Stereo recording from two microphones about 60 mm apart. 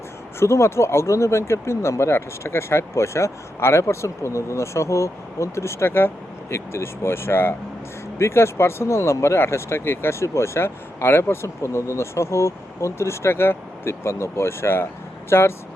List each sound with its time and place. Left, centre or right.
0.3 s speech: left